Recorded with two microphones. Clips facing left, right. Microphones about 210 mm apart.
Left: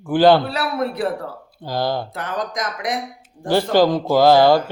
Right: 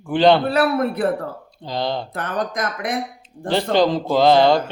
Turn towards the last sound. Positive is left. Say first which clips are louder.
# left 2 dB
turn(degrees=5)  # may be behind; listen again after turning